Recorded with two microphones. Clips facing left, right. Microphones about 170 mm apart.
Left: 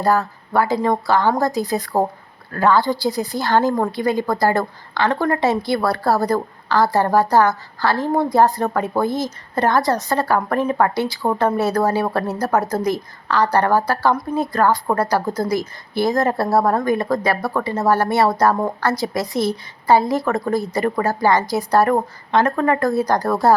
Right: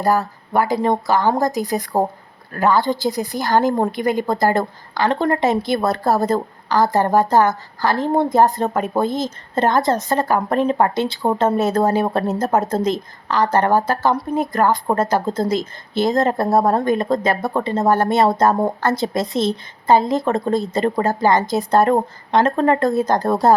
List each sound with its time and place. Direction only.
0.0 s a woman's voice: 15° right (ahead or behind)